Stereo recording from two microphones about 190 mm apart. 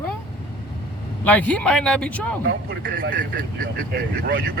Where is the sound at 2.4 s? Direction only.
55° right (ahead or behind).